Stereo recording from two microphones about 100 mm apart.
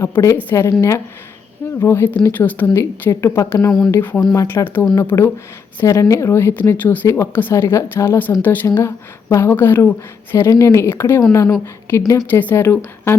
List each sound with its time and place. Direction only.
0.1 s a woman's voice: 30° left (ahead or behind)
12.3 s a woman's voice: 20° left (ahead or behind)